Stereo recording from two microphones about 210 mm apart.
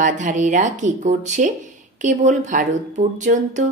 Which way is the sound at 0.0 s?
35° right (ahead or behind).